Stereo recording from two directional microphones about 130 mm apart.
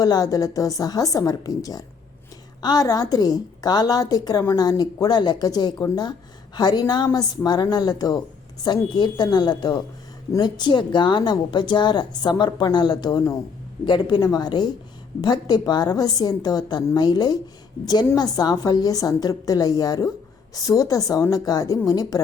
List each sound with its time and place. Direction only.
0.0 s a woman's voice: 25° left (ahead or behind)